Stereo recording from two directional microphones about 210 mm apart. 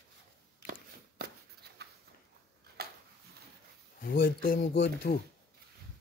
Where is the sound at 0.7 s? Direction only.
50° right (ahead or behind).